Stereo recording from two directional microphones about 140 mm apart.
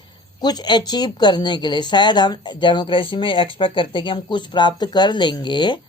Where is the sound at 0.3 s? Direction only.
30° left (ahead or behind).